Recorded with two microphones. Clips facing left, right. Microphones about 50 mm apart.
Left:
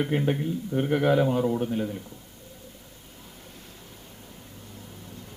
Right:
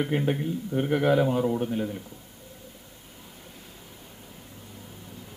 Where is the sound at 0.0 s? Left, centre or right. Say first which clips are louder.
Left 1 dB; centre.